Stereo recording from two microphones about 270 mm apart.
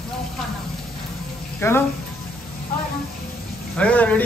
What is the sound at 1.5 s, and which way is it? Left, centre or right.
Speech, centre.